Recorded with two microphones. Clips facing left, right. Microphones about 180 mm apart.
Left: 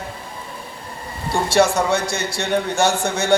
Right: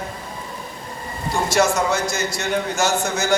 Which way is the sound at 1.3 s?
30° left (ahead or behind).